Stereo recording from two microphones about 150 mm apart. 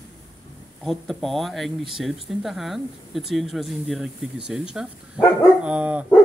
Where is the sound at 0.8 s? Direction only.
Centre (ahead or behind).